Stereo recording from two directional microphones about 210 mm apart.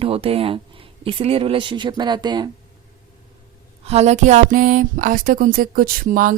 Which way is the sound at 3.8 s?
30° right (ahead or behind).